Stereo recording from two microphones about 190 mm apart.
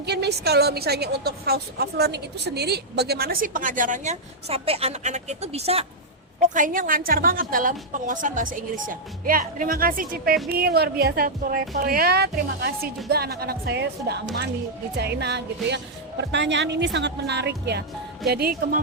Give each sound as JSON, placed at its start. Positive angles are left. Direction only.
{"t": 0.0, "sound": "a woman's voice", "side_deg": -60}
{"t": 6.4, "sound": "a woman's voice", "side_deg": -45}